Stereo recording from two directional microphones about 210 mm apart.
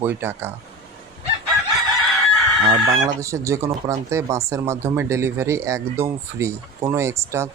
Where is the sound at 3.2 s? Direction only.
15° right (ahead or behind).